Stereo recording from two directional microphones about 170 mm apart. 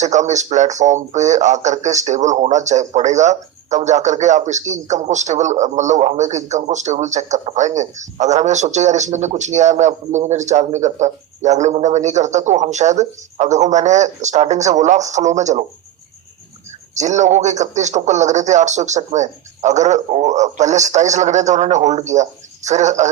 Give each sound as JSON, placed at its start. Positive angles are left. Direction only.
{"t": 0.0, "sound": "speech", "side_deg": -45}
{"t": 16.9, "sound": "speech", "side_deg": -45}